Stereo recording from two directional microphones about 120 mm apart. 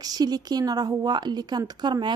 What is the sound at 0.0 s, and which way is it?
A woman's voice, 35° right (ahead or behind).